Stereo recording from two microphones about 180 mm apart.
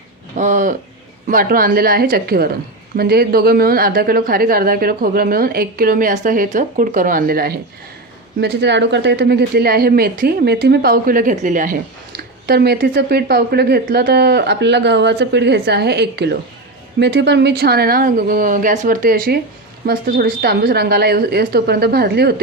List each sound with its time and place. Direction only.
0.3 s a woman's voice: 45° right (ahead or behind)
8.4 s a woman's voice: 70° right (ahead or behind)